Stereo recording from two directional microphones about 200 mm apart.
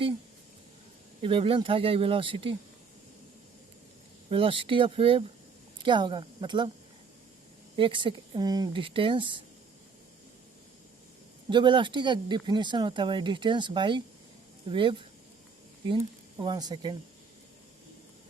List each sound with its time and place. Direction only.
1.2 s speech: 25° right (ahead or behind)
4.3 s speech: 25° right (ahead or behind)
7.8 s speech: 25° right (ahead or behind)
11.4 s speech: 25° right (ahead or behind)
16.4 s speech: 20° right (ahead or behind)